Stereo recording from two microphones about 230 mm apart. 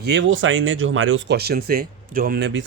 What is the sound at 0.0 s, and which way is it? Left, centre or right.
Speech, right.